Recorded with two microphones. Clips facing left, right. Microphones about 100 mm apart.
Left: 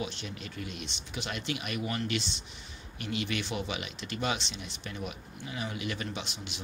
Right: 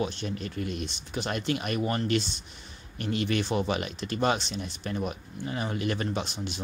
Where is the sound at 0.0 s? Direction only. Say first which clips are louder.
Right 7 dB; 40° right (ahead or behind).